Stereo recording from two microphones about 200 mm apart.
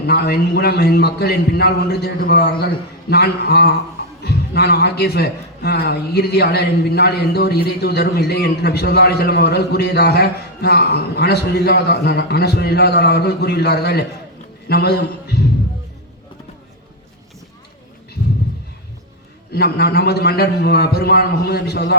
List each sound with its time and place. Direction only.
0.0 s a man's voice: 55° left (ahead or behind)
19.5 s a man's voice: 55° left (ahead or behind)